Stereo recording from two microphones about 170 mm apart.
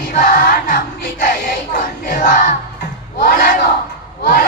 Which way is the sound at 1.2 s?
55° left (ahead or behind).